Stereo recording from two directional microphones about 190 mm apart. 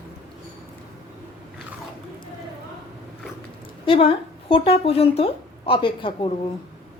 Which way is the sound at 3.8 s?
30° left (ahead or behind).